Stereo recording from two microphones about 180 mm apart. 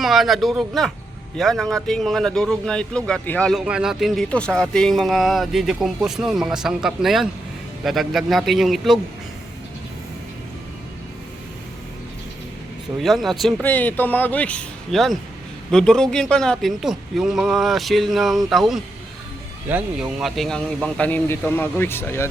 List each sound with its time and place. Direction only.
0.0 s speech: centre (ahead or behind)
13.0 s speech: centre (ahead or behind)